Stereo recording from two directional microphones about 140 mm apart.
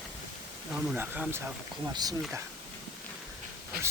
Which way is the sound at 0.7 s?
10° right (ahead or behind).